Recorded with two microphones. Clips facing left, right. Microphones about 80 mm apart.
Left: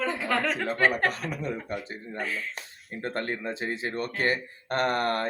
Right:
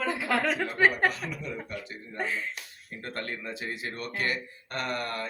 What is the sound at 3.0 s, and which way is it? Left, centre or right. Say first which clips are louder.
Speech: left 5 dB; left.